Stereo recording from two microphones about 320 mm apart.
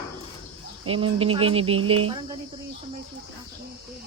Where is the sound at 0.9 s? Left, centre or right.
Centre.